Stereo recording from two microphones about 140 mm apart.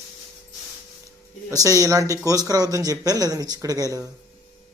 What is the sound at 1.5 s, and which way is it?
Speech, 25° right (ahead or behind).